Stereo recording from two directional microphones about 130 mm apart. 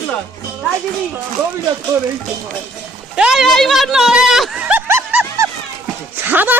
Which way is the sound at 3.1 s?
5° right (ahead or behind).